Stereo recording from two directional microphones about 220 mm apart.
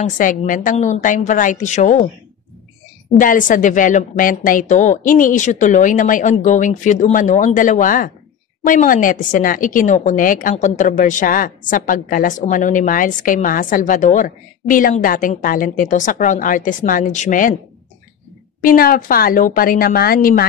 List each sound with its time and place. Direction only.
0.0 s a woman's voice: 35° left (ahead or behind)
3.2 s a woman's voice: 35° left (ahead or behind)
18.6 s a woman's voice: 40° left (ahead or behind)